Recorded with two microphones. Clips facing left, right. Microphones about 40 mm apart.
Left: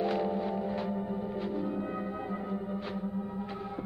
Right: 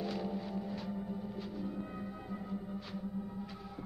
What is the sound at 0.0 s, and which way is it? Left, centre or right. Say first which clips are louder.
Gong: left 8 dB; left.